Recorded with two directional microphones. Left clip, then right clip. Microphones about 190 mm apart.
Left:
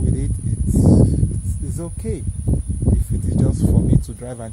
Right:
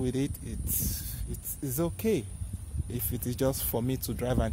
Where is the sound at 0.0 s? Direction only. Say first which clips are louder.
Left 3 dB; 20° right (ahead or behind).